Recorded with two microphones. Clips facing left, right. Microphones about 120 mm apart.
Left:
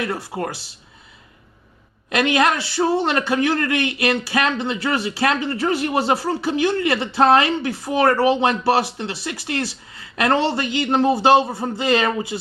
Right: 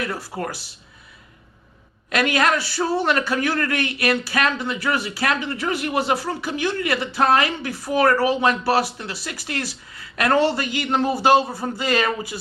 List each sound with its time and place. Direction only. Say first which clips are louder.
0.0 s a man's voice: left 2 dB; 20° left (ahead or behind)
2.0 s a man's voice: left 2 dB; 20° left (ahead or behind)